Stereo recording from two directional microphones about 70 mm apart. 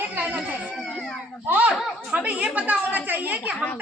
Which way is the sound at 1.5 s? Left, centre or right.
Right.